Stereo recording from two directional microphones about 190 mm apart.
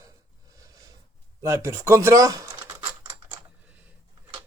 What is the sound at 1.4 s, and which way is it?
A man's voice, 15° right (ahead or behind).